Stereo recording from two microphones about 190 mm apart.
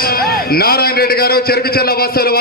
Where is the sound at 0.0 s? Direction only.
55° left (ahead or behind).